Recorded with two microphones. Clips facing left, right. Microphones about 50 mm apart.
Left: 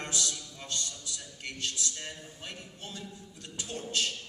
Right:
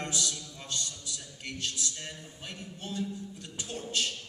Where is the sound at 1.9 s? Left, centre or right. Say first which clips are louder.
Even; centre.